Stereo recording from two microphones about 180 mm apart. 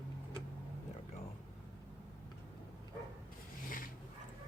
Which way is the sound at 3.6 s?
50° left (ahead or behind).